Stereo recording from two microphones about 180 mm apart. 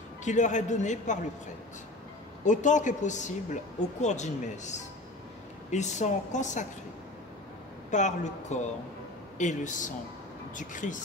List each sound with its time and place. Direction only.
0.2 s speech: 40° left (ahead or behind)
2.4 s speech: 45° left (ahead or behind)
7.9 s speech: 40° left (ahead or behind)